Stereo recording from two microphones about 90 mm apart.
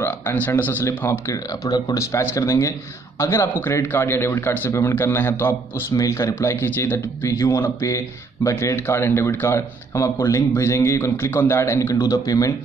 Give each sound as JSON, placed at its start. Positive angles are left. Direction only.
{"t": 0.0, "sound": "speech", "side_deg": 25}
{"t": 1.3, "sound": "speech", "side_deg": 45}
{"t": 2.1, "sound": "speech", "side_deg": 30}